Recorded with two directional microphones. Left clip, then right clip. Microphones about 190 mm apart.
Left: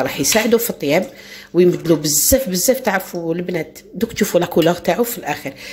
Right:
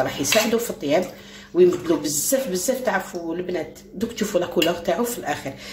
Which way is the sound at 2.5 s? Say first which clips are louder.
Left 6 dB; 50° left (ahead or behind).